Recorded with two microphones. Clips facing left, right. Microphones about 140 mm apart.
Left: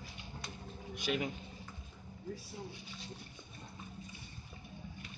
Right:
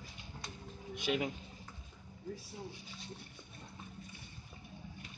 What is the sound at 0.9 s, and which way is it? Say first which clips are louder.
Speech: right 1 dB; 20° right (ahead or behind).